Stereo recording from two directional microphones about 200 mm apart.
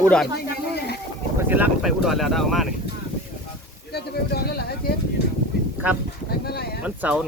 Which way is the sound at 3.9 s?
50° left (ahead or behind).